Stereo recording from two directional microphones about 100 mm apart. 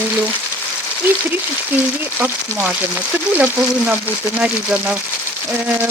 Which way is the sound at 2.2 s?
15° right (ahead or behind).